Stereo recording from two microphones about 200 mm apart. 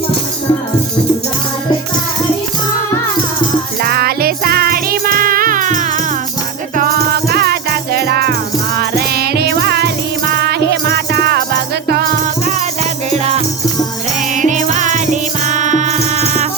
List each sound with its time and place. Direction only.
3.8 s music: 50° right (ahead or behind)
13.1 s music: 35° right (ahead or behind)